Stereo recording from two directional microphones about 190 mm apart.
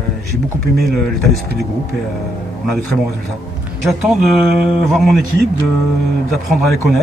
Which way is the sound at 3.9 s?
Centre (ahead or behind).